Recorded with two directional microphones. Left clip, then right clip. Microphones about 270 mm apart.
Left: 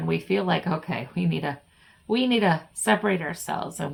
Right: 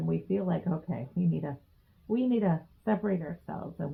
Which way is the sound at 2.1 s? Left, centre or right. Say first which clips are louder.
Left 7 dB; centre.